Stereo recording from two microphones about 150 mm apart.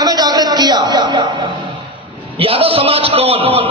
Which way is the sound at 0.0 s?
25° right (ahead or behind).